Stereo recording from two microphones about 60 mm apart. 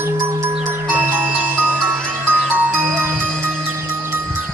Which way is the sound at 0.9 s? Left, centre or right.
Right.